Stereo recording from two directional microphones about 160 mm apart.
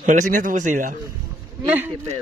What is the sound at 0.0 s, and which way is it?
Speech, 55° right (ahead or behind).